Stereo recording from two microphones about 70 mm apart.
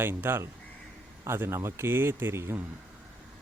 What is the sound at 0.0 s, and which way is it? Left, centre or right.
Speech, right.